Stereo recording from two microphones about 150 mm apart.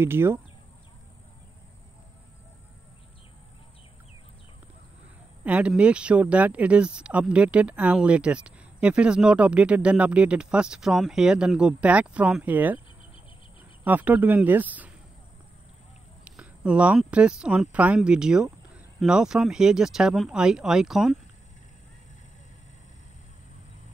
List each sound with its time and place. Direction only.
0.0 s speech: 15° right (ahead or behind)
5.4 s speech: 10° right (ahead or behind)
13.8 s speech: 10° right (ahead or behind)
16.3 s speech: 5° right (ahead or behind)